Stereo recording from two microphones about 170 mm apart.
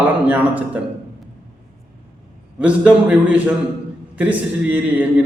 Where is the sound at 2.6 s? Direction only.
10° right (ahead or behind).